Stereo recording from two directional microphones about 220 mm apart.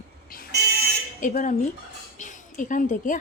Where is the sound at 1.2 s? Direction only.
35° left (ahead or behind).